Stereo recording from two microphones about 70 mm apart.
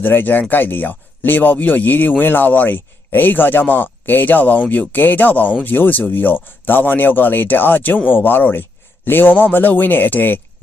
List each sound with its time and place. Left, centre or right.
0.0 s speech: left